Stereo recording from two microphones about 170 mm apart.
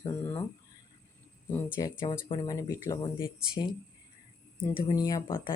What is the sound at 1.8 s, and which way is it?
Speech, 20° left (ahead or behind).